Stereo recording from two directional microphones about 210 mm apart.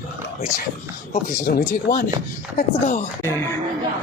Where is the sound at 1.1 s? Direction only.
35° left (ahead or behind).